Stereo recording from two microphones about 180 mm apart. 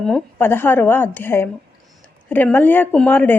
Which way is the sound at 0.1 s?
10° left (ahead or behind).